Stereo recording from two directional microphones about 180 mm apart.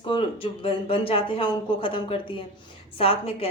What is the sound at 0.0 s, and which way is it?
A woman's voice, 30° left (ahead or behind).